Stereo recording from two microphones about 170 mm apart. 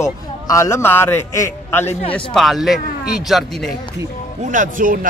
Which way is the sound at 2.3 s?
Centre (ahead or behind).